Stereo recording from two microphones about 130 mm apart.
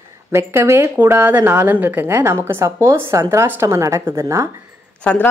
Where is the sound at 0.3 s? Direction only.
20° right (ahead or behind).